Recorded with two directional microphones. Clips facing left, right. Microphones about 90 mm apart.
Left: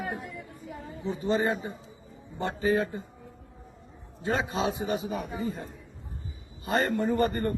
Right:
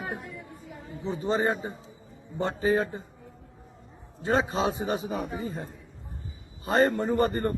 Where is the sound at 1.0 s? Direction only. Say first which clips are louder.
Right 1 dB; 30° right (ahead or behind).